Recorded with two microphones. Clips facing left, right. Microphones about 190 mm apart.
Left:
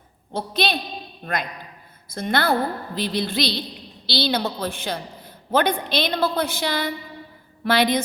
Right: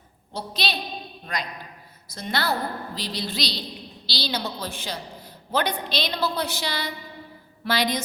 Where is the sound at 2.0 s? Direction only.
55° left (ahead or behind).